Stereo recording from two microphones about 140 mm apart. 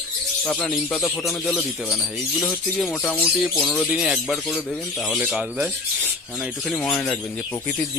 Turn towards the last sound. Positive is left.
turn(degrees=20)  # may be behind; listen again after turning